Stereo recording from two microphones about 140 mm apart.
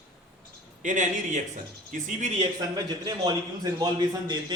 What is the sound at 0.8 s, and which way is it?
A man's voice, 60° right (ahead or behind).